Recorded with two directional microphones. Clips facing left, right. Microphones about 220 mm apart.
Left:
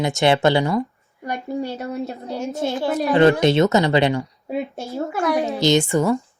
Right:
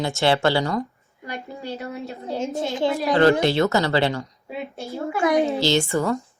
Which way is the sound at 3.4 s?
20° left (ahead or behind).